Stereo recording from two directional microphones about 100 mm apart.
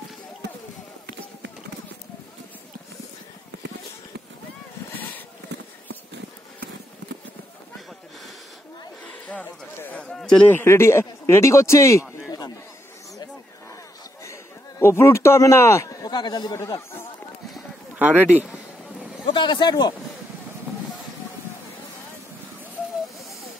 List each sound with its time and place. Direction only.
9.0 s a sound: 15° left (ahead or behind)
10.5 s speech: 25° left (ahead or behind)
14.2 s a man's voice: 25° left (ahead or behind); by 16.5 s 45° left (ahead or behind)
17.9 s speech: 15° right (ahead or behind)
19.2 s speech: 50° left (ahead or behind)